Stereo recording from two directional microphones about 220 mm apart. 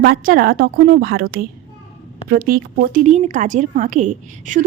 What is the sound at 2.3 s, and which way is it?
A woman's voice, 40° right (ahead or behind).